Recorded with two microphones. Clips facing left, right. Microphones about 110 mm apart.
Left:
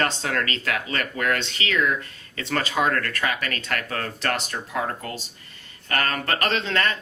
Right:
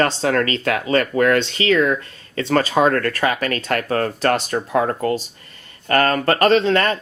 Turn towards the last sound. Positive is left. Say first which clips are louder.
# right 9 dB
turn(degrees=-45)  # may be behind; listen again after turning